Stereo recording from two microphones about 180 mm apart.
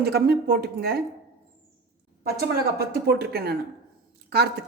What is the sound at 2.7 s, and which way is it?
Speech, 60° right (ahead or behind).